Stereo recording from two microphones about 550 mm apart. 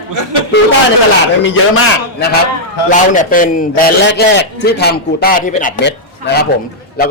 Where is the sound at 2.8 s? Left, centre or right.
Centre.